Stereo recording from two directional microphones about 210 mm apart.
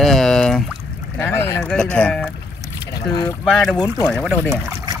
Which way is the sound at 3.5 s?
Centre (ahead or behind).